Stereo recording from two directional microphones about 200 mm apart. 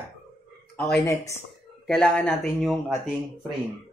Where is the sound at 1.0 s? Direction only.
15° left (ahead or behind).